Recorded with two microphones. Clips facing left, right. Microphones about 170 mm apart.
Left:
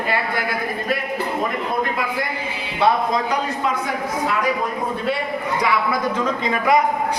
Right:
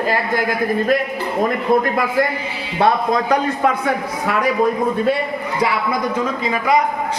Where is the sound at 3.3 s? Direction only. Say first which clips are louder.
Right 5 dB; 55° right (ahead or behind).